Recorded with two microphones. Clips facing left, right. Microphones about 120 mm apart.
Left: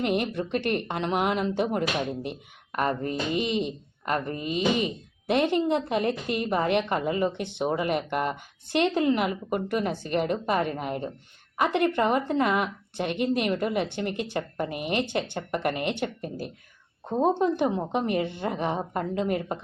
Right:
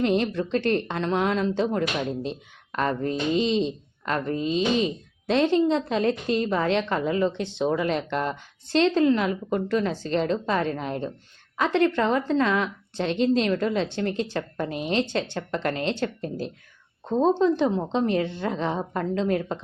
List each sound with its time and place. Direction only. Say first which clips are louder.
0.0 s a woman's voice: right 3 dB; 15° left (ahead or behind)